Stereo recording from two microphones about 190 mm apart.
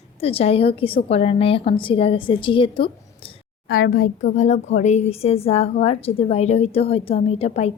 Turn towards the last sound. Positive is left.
turn(degrees=35)  # may be behind; listen again after turning